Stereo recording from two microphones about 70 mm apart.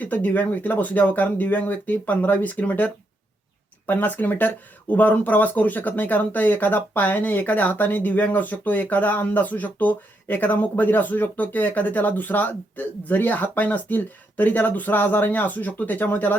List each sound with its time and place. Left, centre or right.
0.0 s speech: left